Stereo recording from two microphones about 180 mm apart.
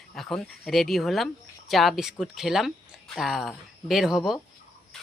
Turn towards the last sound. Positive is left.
turn(degrees=0)  # may be behind; listen again after turning